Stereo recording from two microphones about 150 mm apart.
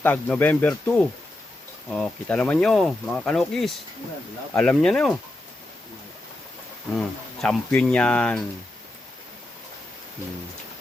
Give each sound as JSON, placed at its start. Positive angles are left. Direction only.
{"t": 0.0, "sound": "speech", "side_deg": 10}
{"t": 7.4, "sound": "speech", "side_deg": 5}